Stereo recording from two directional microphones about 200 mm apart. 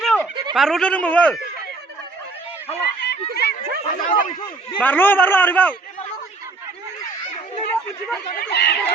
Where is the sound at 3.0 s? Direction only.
55° left (ahead or behind).